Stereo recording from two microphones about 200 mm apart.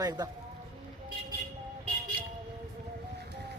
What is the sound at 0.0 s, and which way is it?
Speech, 20° right (ahead or behind).